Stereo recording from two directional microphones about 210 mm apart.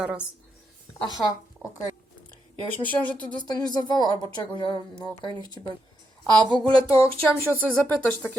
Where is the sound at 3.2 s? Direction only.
20° left (ahead or behind).